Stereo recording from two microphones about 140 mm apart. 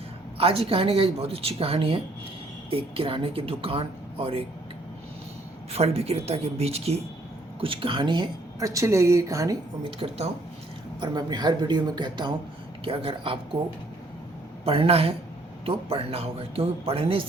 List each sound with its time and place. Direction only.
0.3 s a woman's voice: 45° right (ahead or behind)
5.7 s a woman's voice: 45° right (ahead or behind); by 9.6 s 20° right (ahead or behind)
10.0 s a woman's voice: 40° right (ahead or behind)
11.0 s a woman's voice: 30° right (ahead or behind)
14.6 s a woman's voice: 45° right (ahead or behind)